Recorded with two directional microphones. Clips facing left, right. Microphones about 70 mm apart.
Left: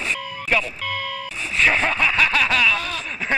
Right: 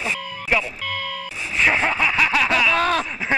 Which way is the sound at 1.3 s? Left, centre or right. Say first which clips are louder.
Even; centre.